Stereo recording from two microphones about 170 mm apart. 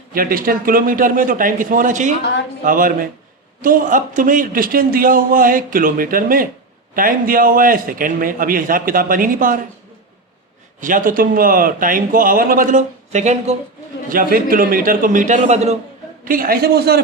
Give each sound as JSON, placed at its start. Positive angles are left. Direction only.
{"t": 0.1, "sound": "a man's voice", "side_deg": -55}
{"t": 10.8, "sound": "a man's voice", "side_deg": -50}
{"t": 14.1, "sound": "a man's voice", "side_deg": -55}
{"t": 16.2, "sound": "a man's voice", "side_deg": -55}